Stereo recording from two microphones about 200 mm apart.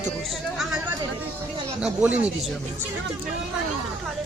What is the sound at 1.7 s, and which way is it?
Speech, 5° right (ahead or behind).